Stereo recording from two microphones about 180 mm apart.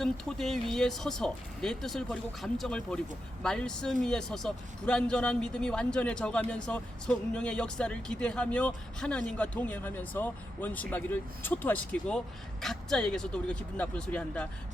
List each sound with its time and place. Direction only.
0.0 s a man's voice: centre (ahead or behind)